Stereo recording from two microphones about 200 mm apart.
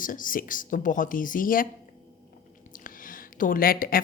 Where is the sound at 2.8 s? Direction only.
45° left (ahead or behind).